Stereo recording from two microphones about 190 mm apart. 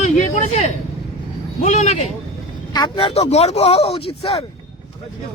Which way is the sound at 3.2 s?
35° left (ahead or behind).